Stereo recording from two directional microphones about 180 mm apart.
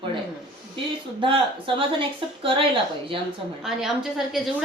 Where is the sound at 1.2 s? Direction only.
30° right (ahead or behind).